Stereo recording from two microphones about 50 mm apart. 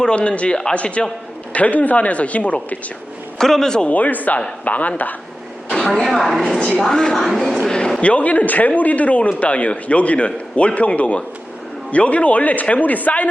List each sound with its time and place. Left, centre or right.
0.0 s speech: left
3.3 s a man's voice: centre
3.8 s speech: left
5.8 s a woman's voice: centre
6.7 s a man's voice: centre
7.2 s a woman's voice: centre
7.7 s a sound: centre
8.0 s speech: left